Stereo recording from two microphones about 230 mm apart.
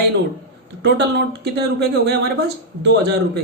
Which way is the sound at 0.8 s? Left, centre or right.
Right.